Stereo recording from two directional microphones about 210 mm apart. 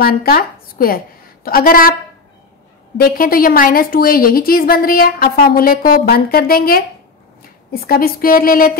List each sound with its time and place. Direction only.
0.0 s a woman's voice: 45° left (ahead or behind)
3.0 s a woman's voice: 45° left (ahead or behind)